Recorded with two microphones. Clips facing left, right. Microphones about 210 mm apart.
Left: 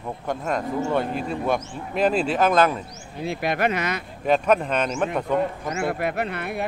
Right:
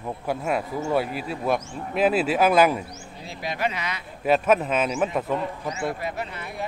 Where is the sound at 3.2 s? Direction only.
60° left (ahead or behind).